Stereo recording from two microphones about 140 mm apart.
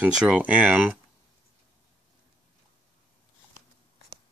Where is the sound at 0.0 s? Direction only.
10° right (ahead or behind).